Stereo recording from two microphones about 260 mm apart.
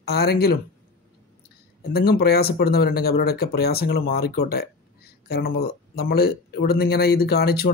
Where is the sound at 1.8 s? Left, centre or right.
Left.